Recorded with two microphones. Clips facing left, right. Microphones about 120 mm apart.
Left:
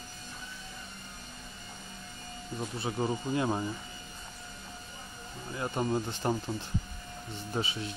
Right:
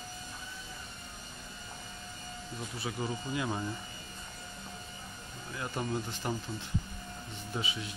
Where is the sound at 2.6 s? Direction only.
30° left (ahead or behind).